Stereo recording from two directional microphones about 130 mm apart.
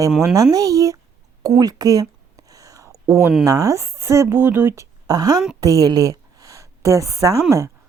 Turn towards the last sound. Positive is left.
turn(degrees=-25)  # may be behind; listen again after turning